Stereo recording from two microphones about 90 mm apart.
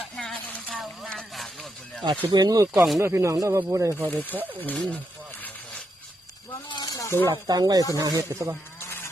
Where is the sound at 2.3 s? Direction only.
50° right (ahead or behind).